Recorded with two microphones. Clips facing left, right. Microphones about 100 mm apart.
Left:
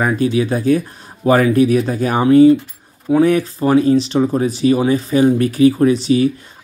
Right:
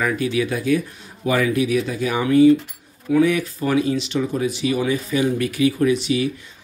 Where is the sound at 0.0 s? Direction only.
35° left (ahead or behind).